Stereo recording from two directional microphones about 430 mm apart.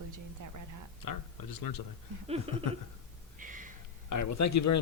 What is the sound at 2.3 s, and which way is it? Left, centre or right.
Laughter, centre.